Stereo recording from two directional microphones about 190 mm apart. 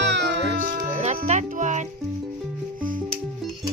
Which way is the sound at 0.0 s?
65° right (ahead or behind).